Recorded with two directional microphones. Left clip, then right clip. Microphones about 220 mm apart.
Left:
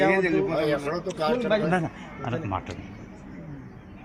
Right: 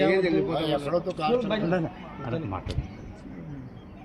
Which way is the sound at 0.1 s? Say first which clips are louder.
Left 1 dB; 15° left (ahead or behind).